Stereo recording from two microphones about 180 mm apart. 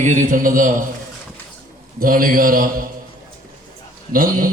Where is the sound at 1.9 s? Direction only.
50° right (ahead or behind).